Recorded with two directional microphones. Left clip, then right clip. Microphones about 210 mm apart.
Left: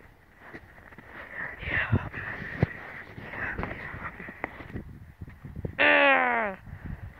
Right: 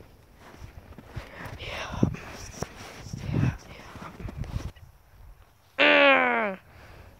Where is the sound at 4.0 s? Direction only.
5° right (ahead or behind).